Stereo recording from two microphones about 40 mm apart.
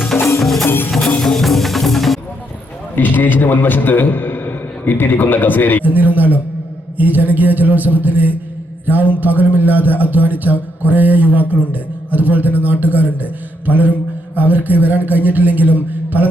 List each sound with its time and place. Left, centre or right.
0.1 s music: left
1.2 s music: centre
2.9 s a man's voice: left
5.8 s a man's voice: right